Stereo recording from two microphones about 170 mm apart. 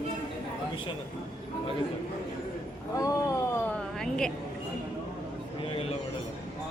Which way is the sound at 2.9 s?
20° left (ahead or behind).